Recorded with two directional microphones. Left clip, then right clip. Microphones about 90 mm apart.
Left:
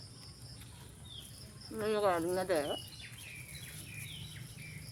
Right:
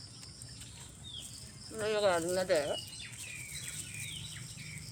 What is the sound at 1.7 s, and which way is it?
Speech, 15° left (ahead or behind).